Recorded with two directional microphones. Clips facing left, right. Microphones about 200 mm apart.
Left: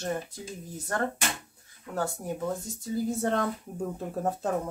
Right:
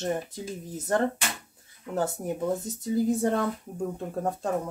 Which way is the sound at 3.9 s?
Centre (ahead or behind).